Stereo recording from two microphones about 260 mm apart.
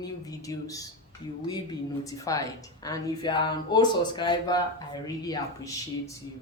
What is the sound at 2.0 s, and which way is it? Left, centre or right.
A woman's voice, centre.